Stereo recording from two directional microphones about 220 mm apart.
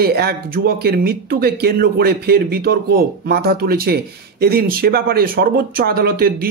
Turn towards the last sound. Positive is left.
turn(degrees=-45)  # may be behind; listen again after turning